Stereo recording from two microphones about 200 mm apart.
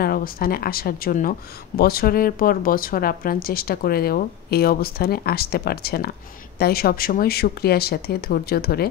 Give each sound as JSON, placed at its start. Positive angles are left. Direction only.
{"t": 0.0, "sound": "speech", "side_deg": 45}